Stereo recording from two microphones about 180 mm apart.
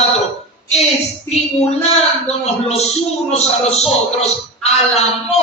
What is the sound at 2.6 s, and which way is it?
A man's voice, 35° left (ahead or behind).